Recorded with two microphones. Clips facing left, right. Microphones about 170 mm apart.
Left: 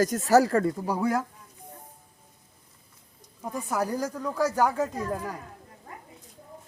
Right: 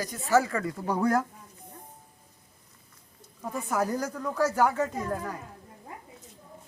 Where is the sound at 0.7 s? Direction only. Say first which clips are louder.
Right 1 dB; 10° left (ahead or behind).